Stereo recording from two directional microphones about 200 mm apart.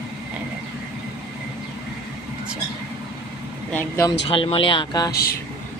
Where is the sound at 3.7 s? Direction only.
10° left (ahead or behind).